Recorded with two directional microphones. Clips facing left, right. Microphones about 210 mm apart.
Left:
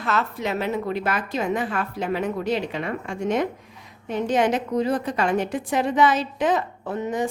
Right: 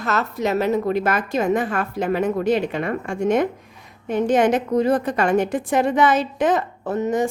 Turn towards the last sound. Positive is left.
turn(degrees=-45)  # may be behind; listen again after turning